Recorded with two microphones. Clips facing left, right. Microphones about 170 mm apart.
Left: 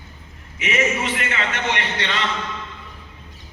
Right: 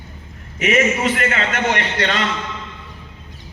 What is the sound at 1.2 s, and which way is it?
A man's voice, 45° right (ahead or behind).